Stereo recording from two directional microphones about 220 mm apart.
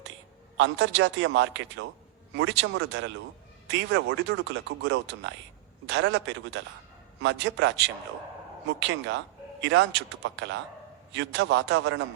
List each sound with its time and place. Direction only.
0.5 s speech: 60° right (ahead or behind)